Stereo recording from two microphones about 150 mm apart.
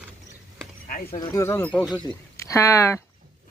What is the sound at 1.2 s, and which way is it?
Speech, 20° left (ahead or behind).